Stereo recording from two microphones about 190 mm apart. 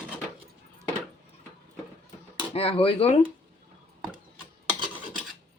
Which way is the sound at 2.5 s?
30° left (ahead or behind).